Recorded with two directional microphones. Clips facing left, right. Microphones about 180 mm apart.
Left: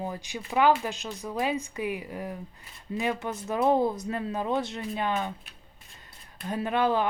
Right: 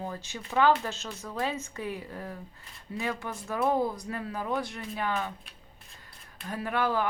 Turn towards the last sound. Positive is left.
turn(degrees=20)  # may be behind; listen again after turning